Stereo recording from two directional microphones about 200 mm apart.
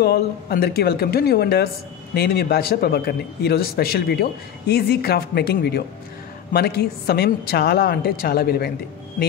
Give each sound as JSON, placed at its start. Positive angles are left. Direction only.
{"t": 0.0, "sound": "a man's voice", "side_deg": 50}